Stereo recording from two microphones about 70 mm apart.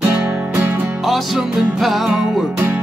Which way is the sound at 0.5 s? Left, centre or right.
Right.